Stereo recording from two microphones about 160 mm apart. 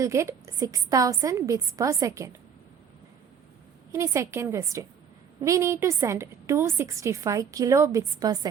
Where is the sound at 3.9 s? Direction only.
20° right (ahead or behind).